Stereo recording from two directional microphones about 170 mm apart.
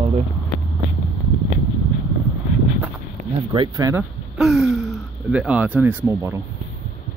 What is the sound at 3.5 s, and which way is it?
Speech, 25° right (ahead or behind).